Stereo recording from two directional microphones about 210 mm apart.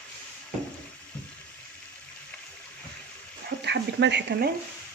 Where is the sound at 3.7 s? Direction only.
55° right (ahead or behind).